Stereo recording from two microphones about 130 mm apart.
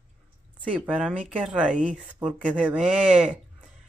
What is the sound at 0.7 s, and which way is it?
Speech, 5° right (ahead or behind).